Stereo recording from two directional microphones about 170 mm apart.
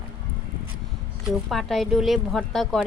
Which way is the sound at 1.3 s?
Centre (ahead or behind).